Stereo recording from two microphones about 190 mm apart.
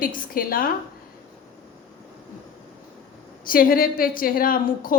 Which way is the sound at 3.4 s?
50° left (ahead or behind).